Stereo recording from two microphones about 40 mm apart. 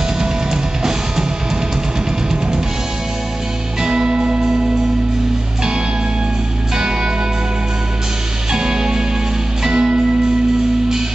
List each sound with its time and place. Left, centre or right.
3.8 s music: centre
8.5 s music: centre